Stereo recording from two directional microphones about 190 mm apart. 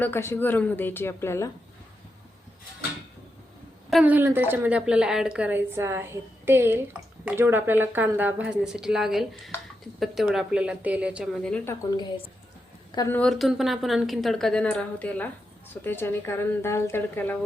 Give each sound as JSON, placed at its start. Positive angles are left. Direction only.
{"t": 0.0, "sound": "a woman's voice", "side_deg": 10}
{"t": 3.8, "sound": "a woman's voice", "side_deg": -5}
{"t": 12.9, "sound": "a woman's voice", "side_deg": 20}
{"t": 13.1, "sound": "a woman's voice", "side_deg": 0}